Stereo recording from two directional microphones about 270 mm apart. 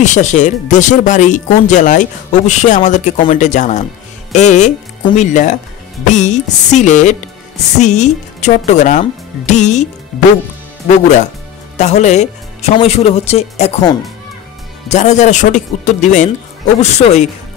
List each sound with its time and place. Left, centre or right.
0.0 s speech: left
11.7 s speech: left